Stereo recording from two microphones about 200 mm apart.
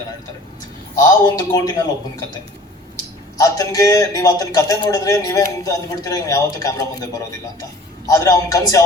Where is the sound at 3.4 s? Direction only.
15° left (ahead or behind).